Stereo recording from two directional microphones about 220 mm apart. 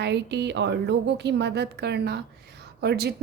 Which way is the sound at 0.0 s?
50° right (ahead or behind).